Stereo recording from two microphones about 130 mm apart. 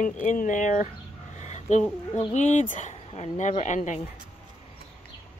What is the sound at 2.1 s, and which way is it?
Speech, 65° left (ahead or behind).